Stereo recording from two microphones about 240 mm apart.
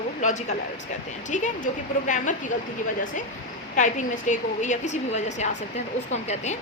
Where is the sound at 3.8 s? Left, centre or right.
Left.